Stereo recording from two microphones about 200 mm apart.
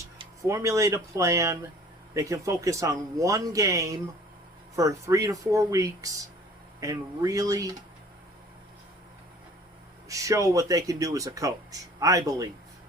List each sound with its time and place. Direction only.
0.4 s speech: 15° right (ahead or behind)
10.1 s speech: 15° right (ahead or behind)